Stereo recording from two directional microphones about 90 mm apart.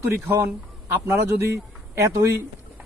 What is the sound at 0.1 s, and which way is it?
A man's voice, 30° right (ahead or behind).